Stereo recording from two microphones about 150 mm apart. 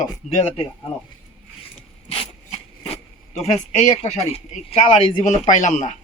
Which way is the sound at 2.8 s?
45° left (ahead or behind).